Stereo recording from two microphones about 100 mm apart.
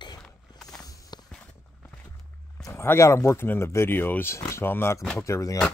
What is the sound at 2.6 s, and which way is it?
Speech, 25° left (ahead or behind).